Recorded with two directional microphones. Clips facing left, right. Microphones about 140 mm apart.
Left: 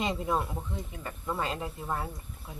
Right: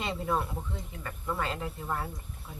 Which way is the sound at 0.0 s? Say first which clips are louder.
Left 1 dB; 15° left (ahead or behind).